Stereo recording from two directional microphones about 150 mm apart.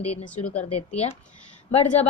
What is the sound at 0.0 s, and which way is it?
A woman's voice, 45° left (ahead or behind).